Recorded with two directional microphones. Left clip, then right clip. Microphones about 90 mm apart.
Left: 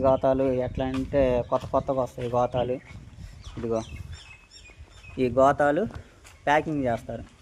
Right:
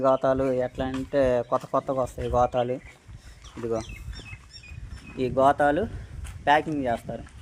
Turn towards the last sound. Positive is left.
turn(degrees=30)  # may be behind; listen again after turning